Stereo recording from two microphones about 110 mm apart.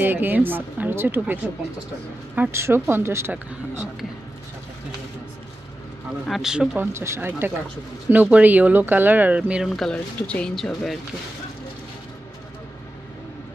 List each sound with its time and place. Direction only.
0.0 s speech: 20° right (ahead or behind)
6.2 s speech: centre (ahead or behind)
6.8 s speech: 25° right (ahead or behind)
9.8 s speech: 10° left (ahead or behind)